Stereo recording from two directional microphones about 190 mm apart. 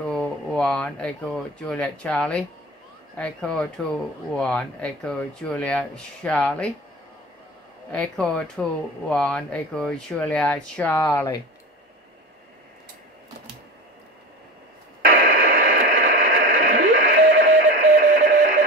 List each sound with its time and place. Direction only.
0.1 s speech: 5° left (ahead or behind)
7.9 s speech: 5° left (ahead or behind)
15.0 s radio: 50° right (ahead or behind)